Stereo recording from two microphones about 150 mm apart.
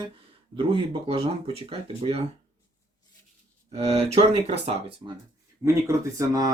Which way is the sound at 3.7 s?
40° right (ahead or behind).